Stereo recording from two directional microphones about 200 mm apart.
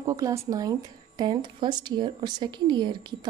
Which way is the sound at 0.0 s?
15° right (ahead or behind).